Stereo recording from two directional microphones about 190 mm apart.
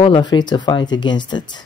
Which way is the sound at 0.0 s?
25° left (ahead or behind).